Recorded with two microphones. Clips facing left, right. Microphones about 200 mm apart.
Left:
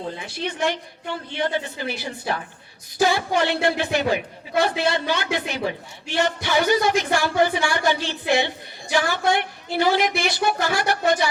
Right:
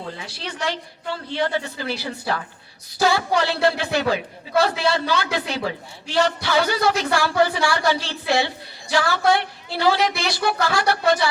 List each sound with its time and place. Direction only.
0.3 s a woman's voice: 15° left (ahead or behind)